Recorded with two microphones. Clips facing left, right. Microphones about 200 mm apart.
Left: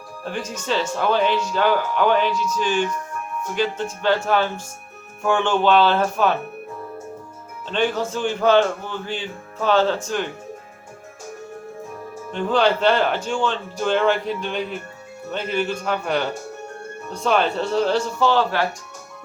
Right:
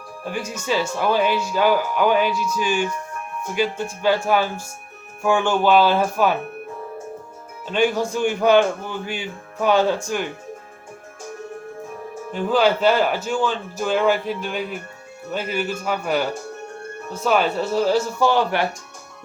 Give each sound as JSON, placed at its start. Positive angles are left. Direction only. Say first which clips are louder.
{"t": 0.3, "sound": "speech", "louder": "right 1 dB", "side_deg": -10}
{"t": 7.7, "sound": "speech", "louder": "right 2 dB", "side_deg": -10}
{"t": 12.3, "sound": "a man's voice", "louder": "right 1 dB", "side_deg": -5}